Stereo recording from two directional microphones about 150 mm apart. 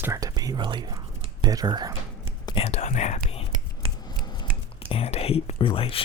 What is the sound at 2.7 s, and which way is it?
Speech, 50° left (ahead or behind).